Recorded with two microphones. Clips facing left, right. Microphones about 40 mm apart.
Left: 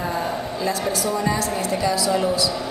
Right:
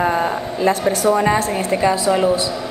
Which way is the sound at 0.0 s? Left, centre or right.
Right.